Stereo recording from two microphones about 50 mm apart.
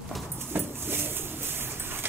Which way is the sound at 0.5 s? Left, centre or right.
Right.